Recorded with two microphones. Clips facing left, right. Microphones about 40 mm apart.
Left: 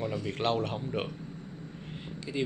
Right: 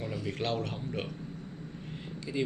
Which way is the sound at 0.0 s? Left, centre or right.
Centre.